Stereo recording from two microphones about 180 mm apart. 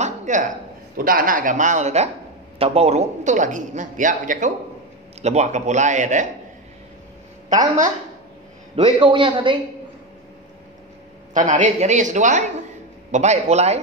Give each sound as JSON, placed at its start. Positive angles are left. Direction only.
{"t": 0.0, "sound": "a sound", "side_deg": -40}
{"t": 0.9, "sound": "speech", "side_deg": -50}
{"t": 8.7, "sound": "a man's voice", "side_deg": -30}
{"t": 11.3, "sound": "speech", "side_deg": -45}